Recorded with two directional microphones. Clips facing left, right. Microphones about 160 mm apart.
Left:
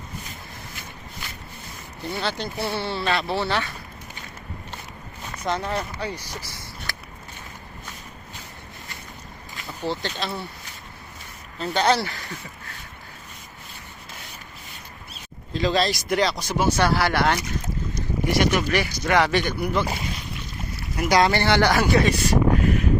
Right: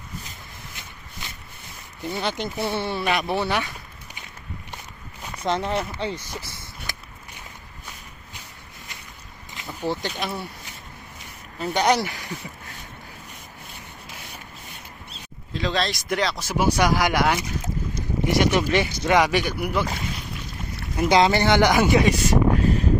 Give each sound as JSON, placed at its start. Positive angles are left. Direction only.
{"t": 2.0, "sound": "speech", "side_deg": -20}
{"t": 5.4, "sound": "speech", "side_deg": -20}
{"t": 6.9, "sound": "a sound", "side_deg": -20}
{"t": 9.6, "sound": "speech", "side_deg": -15}
{"t": 11.6, "sound": "speech", "side_deg": -15}
{"t": 15.5, "sound": "speech", "side_deg": 0}
{"t": 18.3, "sound": "speech", "side_deg": -20}
{"t": 20.9, "sound": "speech", "side_deg": -25}
{"t": 22.6, "sound": "a sound", "side_deg": -30}